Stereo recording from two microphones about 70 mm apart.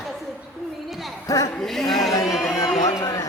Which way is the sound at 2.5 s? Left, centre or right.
Left.